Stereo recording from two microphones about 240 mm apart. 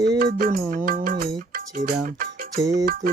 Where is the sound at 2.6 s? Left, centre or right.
Centre.